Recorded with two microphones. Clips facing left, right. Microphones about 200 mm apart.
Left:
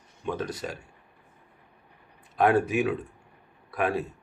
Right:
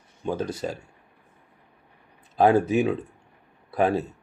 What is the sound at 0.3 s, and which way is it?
Speech, 30° right (ahead or behind).